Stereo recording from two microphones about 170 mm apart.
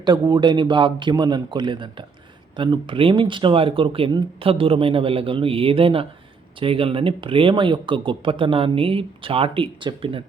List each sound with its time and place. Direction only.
0.0 s speech: 25° right (ahead or behind)